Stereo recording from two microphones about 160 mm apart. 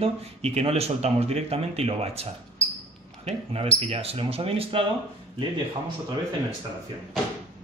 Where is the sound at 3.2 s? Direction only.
40° right (ahead or behind).